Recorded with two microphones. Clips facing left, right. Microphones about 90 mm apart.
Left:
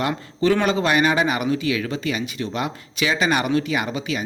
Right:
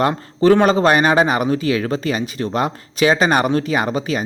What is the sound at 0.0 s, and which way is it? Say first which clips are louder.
Speech: right 6 dB; 40° right (ahead or behind).